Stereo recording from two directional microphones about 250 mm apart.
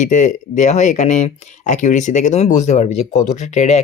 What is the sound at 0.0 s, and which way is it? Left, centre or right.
Speech, left.